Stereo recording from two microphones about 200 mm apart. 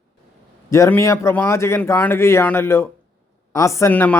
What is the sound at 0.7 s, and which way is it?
Speech, 15° left (ahead or behind).